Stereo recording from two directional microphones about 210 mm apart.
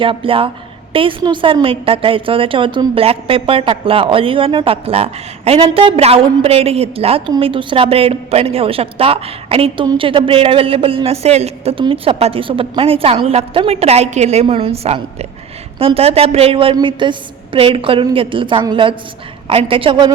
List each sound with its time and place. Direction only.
0.0 s a woman's voice: 25° right (ahead or behind)